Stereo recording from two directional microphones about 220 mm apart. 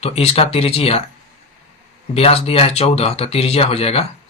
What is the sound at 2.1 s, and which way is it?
Speech, 25° left (ahead or behind).